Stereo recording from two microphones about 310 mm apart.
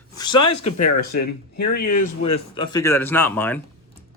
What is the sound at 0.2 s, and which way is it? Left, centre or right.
Speech, centre.